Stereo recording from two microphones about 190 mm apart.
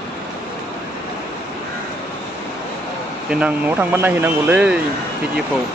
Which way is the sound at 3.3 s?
5° right (ahead or behind).